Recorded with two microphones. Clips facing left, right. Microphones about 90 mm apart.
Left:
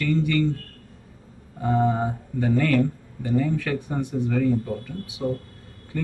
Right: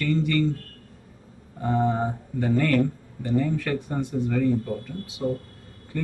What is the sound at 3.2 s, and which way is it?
Speech, 5° left (ahead or behind).